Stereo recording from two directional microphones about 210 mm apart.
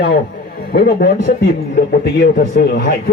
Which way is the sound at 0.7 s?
45° left (ahead or behind).